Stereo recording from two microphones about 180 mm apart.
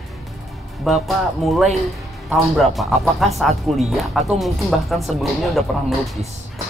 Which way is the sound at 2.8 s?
Centre (ahead or behind).